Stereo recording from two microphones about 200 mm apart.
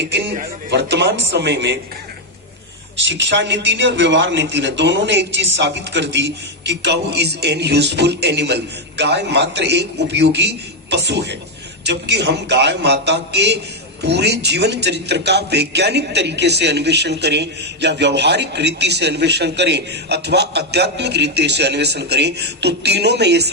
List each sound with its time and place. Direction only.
0.7 s a man's voice: 55° right (ahead or behind)
3.0 s a man's voice: 65° right (ahead or behind)